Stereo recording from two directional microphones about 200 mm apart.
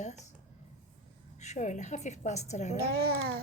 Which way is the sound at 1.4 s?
35° left (ahead or behind).